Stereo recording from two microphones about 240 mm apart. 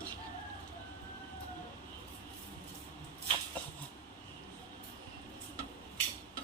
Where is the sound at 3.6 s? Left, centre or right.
Centre.